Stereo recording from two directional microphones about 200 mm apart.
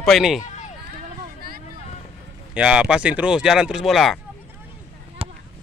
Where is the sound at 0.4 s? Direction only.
35° left (ahead or behind).